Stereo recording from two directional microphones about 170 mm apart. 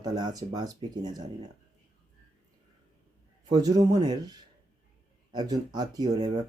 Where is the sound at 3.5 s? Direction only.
25° right (ahead or behind).